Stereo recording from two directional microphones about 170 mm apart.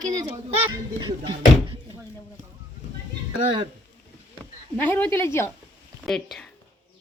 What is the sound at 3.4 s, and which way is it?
Speech, 30° right (ahead or behind).